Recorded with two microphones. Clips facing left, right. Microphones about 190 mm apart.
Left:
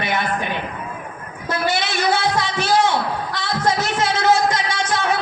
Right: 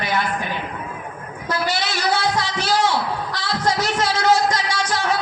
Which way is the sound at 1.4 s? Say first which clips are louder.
Left 2 dB; 25° left (ahead or behind).